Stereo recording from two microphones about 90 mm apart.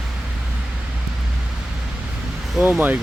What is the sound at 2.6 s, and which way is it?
Speech, 10° right (ahead or behind).